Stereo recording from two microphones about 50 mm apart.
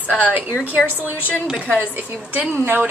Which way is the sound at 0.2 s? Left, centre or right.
Right.